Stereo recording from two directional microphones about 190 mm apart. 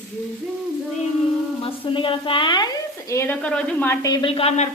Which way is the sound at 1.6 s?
25° left (ahead or behind).